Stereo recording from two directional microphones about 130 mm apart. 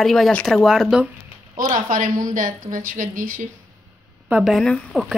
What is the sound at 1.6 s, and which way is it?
A woman's voice, 85° right.